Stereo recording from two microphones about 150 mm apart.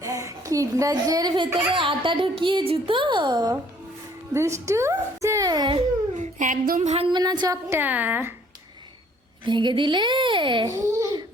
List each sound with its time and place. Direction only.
0.0 s a woman's voice: 20° right (ahead or behind)
6.1 s a sound: 60° right (ahead or behind)
7.1 s a woman's voice: 30° right (ahead or behind); by 8.3 s 10° right (ahead or behind)
9.4 s a child's voice: 30° right (ahead or behind)